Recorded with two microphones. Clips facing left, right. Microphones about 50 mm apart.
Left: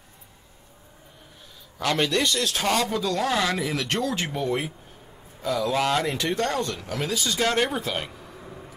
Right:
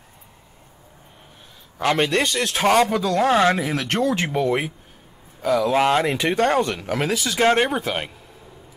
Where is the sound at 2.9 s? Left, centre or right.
Right.